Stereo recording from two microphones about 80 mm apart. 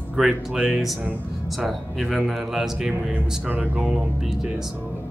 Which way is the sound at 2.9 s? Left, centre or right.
Right.